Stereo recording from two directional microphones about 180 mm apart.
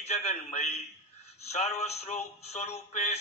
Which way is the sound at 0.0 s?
35° left (ahead or behind).